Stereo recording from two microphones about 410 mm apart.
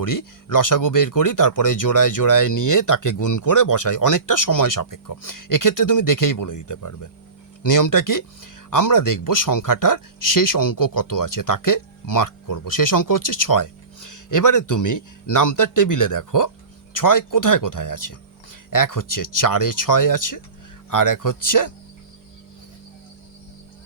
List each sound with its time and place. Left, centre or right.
0.0 s speech: left